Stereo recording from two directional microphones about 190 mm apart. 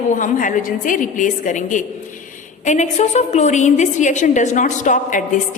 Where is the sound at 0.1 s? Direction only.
40° left (ahead or behind).